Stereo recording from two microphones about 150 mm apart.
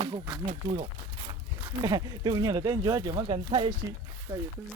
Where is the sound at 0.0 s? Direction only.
30° right (ahead or behind).